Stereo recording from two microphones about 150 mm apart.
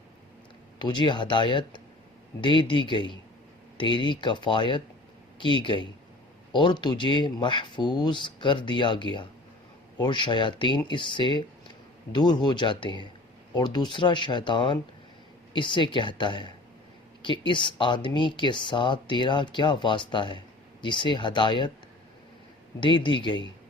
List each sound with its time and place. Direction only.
0.8 s speech: 30° left (ahead or behind)
22.8 s speech: 35° left (ahead or behind)